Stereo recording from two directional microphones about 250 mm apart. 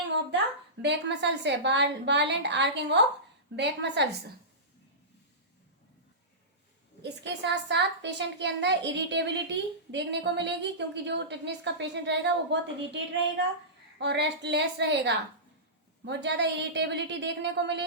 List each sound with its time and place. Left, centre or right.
0.8 s a woman's voice: right
7.0 s a woman's voice: right
14.0 s a woman's voice: right